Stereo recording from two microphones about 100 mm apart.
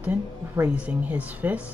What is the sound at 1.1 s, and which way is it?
Speech, 15° right (ahead or behind).